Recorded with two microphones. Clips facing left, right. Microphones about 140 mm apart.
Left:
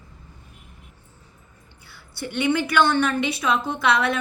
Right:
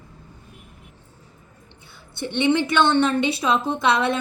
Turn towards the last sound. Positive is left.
turn(degrees=-25)  # may be behind; listen again after turning